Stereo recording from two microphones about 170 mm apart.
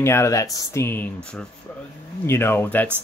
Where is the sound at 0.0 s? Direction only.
15° left (ahead or behind).